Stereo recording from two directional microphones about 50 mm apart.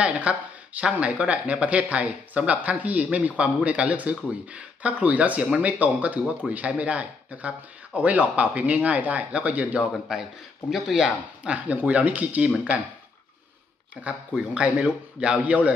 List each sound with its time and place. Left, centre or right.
0.0 s speech: right
10.1 s speech: centre
11.4 s speech: right
14.0 s speech: right